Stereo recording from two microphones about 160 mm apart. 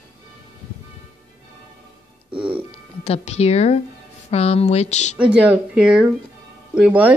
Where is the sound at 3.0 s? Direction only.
40° left (ahead or behind).